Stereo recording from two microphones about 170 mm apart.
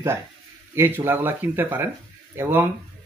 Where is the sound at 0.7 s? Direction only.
15° right (ahead or behind).